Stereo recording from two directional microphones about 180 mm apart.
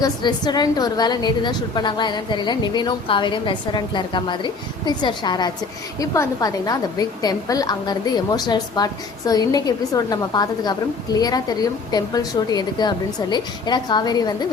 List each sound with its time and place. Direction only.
0.0 s a woman's voice: 25° left (ahead or behind)